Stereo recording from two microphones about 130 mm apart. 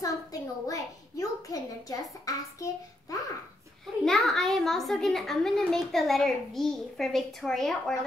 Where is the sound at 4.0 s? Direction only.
Centre (ahead or behind).